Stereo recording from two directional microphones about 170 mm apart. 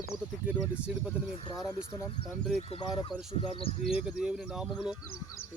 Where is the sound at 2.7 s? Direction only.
30° left (ahead or behind).